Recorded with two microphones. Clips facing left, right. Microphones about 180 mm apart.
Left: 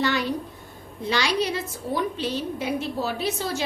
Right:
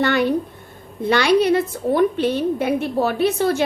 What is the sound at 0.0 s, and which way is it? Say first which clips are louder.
A woman's voice: right 7 dB; 55° right (ahead or behind).